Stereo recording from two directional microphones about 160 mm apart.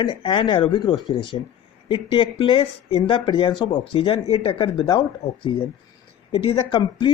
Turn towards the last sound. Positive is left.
turn(degrees=30)  # may be behind; listen again after turning